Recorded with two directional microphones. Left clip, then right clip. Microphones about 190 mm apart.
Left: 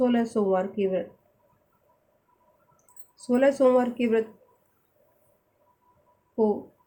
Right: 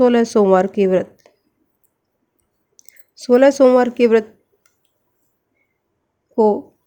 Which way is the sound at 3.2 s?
55° right (ahead or behind).